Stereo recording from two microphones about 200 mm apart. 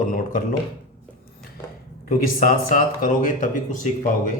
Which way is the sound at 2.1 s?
45° left (ahead or behind).